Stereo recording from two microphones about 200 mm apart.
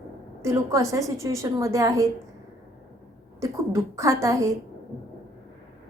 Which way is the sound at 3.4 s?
15° right (ahead or behind).